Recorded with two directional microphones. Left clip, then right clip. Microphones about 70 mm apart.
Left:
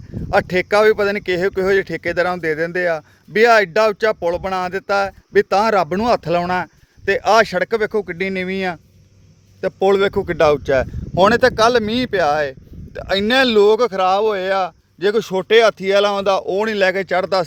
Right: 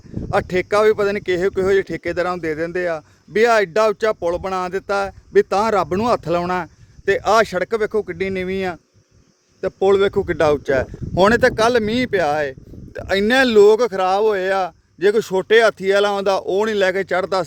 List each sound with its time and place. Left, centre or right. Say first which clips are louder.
0.3 s speech: left 3 dB; centre
3.3 s speech: left 2 dB; right
3.8 s speech: left 1 dB; right; by 7.9 s centre
7.9 s speech: left 1 dB; centre
9.8 s speech: even; centre
10.2 s speech: left 2 dB; right
11.2 s speech: left 1 dB; right
13.2 s speech: right 1 dB; right
16.6 s speech: left 1 dB; right